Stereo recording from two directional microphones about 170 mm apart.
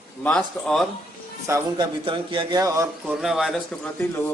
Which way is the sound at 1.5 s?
25° right (ahead or behind).